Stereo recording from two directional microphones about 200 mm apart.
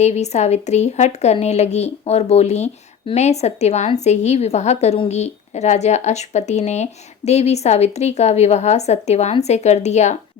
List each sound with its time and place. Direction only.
0.0 s a woman's voice: 35° left (ahead or behind)